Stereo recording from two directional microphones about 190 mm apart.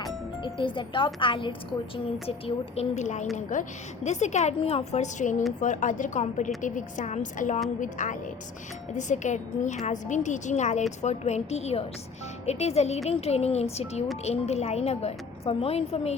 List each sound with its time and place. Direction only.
0.0 s speech: 25° left (ahead or behind)
2.7 s a woman's voice: 35° left (ahead or behind)